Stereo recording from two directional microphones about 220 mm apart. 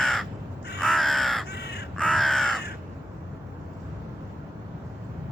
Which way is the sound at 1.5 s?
50° left (ahead or behind).